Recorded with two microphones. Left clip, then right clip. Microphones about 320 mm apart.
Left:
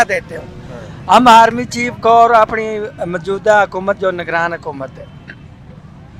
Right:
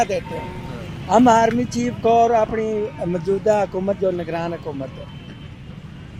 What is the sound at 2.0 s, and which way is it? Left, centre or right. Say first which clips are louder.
Speech: left 7 dB; left.